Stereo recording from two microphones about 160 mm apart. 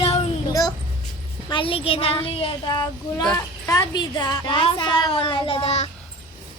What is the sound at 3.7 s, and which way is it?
A woman's voice, 25° left (ahead or behind).